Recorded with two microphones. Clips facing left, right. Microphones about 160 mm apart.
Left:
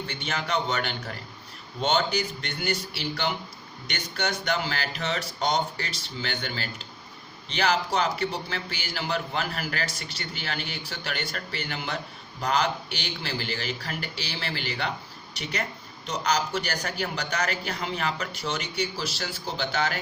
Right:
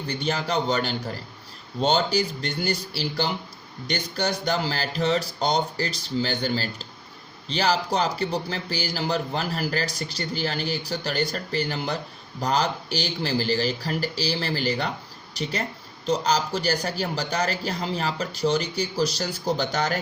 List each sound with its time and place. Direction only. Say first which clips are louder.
0.1 s a man's voice: right 5 dB; 35° right (ahead or behind)
16.0 s a man's voice: right 4 dB; 30° right (ahead or behind)